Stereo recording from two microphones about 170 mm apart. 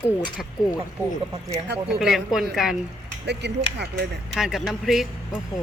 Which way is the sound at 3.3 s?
90° right.